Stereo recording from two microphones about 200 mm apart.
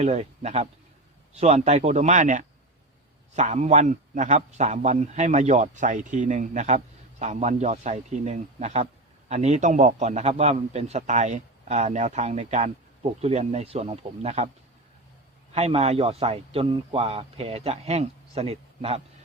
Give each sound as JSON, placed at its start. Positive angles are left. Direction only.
{"t": 0.0, "sound": "a man's voice", "side_deg": -35}
{"t": 15.5, "sound": "speech", "side_deg": -30}